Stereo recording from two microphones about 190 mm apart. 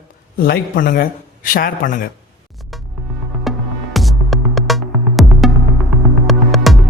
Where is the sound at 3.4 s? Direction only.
Centre (ahead or behind).